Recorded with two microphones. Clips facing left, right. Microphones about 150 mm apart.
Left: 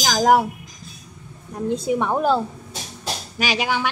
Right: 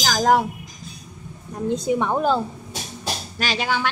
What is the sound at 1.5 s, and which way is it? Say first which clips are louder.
A woman's voice: even; 5° left (ahead or behind).